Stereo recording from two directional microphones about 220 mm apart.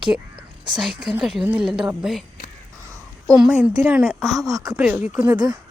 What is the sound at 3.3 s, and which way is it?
A woman's voice, 5° right (ahead or behind).